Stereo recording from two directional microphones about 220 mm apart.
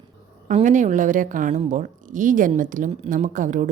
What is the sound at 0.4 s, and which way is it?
A woman's voice, 35° right (ahead or behind).